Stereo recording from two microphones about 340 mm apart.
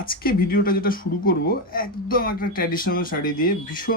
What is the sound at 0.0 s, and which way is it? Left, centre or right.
Speech, left.